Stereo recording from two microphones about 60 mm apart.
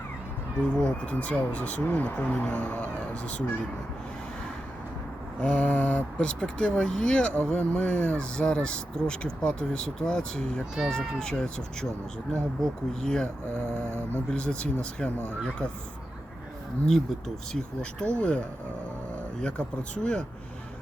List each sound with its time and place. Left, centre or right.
0.6 s speech: centre
5.4 s speech: left
6.1 s speech: centre
13.5 s mantra: right
14.3 s speech: centre
16.8 s speech: centre